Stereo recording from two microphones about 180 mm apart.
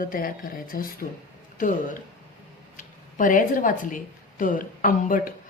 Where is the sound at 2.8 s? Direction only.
45° left (ahead or behind).